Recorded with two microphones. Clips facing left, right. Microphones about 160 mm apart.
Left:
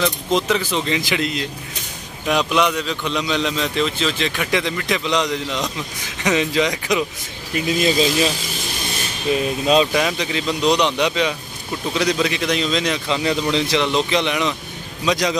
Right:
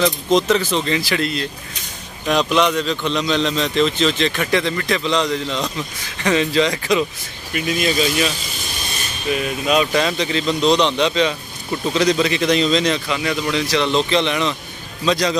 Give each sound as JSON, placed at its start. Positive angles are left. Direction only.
{"t": 0.3, "sound": "a man's voice", "side_deg": 10}
{"t": 7.5, "sound": "speech", "side_deg": 30}
{"t": 9.9, "sound": "a man's voice", "side_deg": 10}
{"t": 13.1, "sound": "speech", "side_deg": 30}
{"t": 13.8, "sound": "a man's voice", "side_deg": 10}